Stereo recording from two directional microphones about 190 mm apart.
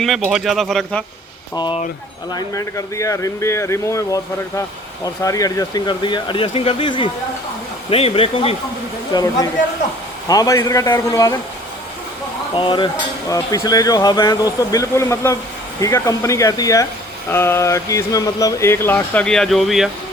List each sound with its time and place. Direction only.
0.0 s speech: centre (ahead or behind)
1.5 s speech: 25° left (ahead or behind)
9.1 s speech: 20° left (ahead or behind)
12.5 s speech: 25° left (ahead or behind); by 19.9 s centre (ahead or behind)